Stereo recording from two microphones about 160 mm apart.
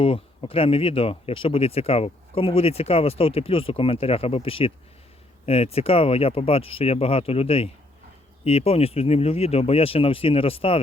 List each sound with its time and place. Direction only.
0.0 s speech: 35° left (ahead or behind)